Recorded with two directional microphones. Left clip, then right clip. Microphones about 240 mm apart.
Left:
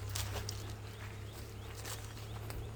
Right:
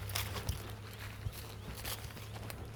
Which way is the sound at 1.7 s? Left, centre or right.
Right.